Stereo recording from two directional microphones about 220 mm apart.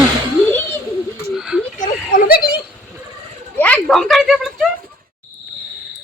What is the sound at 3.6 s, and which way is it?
A woman's voice, 5° left (ahead or behind).